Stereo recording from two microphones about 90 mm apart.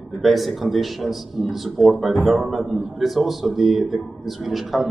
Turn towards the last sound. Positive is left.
turn(degrees=0)  # may be behind; listen again after turning